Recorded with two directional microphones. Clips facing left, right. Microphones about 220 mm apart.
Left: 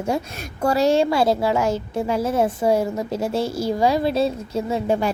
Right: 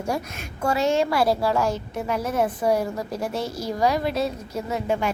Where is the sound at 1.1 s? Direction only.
25° left (ahead or behind).